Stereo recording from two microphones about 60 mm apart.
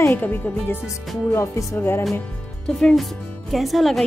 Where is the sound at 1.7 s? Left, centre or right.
Left.